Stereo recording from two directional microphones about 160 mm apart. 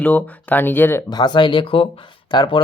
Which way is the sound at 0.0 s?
10° left (ahead or behind).